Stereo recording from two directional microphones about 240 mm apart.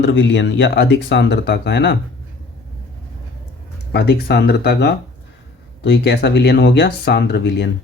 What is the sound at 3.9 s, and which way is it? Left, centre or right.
Speech, left.